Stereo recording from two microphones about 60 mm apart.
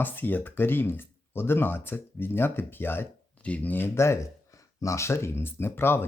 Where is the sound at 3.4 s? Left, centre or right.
Left.